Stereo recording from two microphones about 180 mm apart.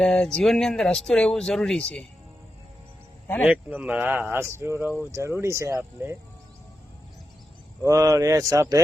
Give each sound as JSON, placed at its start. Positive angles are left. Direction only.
{"t": 0.0, "sound": "speech", "side_deg": 5}
{"t": 3.4, "sound": "speech", "side_deg": -10}
{"t": 7.8, "sound": "speech", "side_deg": -15}